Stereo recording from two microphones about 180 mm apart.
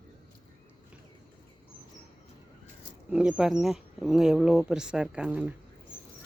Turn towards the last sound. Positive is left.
turn(degrees=-10)  # may be behind; listen again after turning